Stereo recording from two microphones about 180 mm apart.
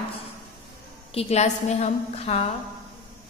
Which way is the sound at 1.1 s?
35° left (ahead or behind).